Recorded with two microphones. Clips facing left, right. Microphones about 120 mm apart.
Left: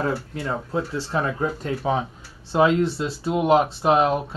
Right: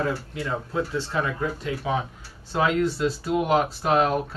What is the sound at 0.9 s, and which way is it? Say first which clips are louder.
Speech: left 2 dB; 35° left (ahead or behind).